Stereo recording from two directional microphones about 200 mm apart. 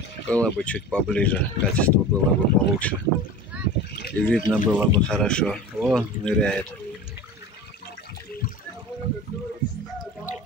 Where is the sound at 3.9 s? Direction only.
50° left (ahead or behind).